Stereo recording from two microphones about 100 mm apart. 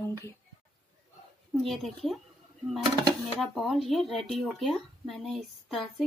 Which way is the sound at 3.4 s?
Centre (ahead or behind).